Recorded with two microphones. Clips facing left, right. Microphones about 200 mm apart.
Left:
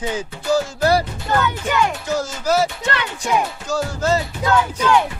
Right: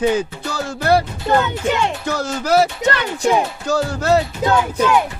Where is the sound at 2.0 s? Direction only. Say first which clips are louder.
Even; 65° right (ahead or behind).